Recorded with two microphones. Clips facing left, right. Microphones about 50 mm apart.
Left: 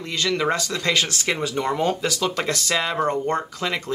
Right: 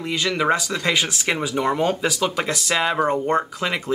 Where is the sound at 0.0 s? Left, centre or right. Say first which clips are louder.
Right 1 dB; centre.